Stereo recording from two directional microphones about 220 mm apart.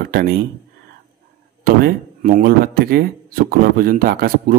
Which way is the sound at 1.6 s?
40° right (ahead or behind).